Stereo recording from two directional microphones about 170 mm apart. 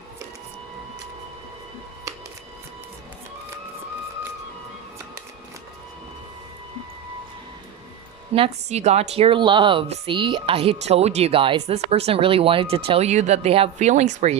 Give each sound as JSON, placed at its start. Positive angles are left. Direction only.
{"t": 8.3, "sound": "a woman's voice", "side_deg": -40}